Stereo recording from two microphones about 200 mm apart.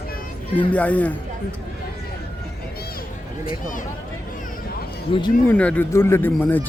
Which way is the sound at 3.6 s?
40° left (ahead or behind).